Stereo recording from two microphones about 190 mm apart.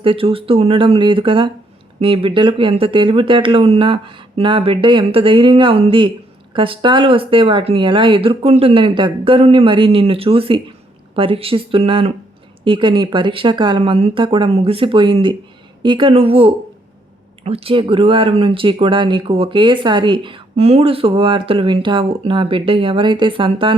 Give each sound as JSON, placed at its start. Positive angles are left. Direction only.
{"t": 0.0, "sound": "speech", "side_deg": -30}